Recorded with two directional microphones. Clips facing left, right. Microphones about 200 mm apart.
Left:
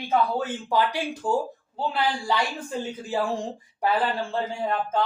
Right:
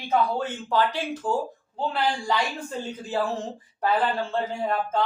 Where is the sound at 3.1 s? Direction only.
10° left (ahead or behind).